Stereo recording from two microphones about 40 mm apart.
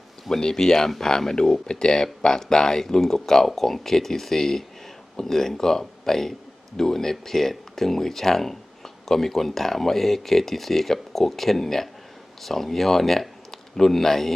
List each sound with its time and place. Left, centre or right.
0.3 s speech: centre